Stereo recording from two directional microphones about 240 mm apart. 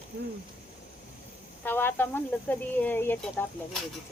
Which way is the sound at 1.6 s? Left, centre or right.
Centre.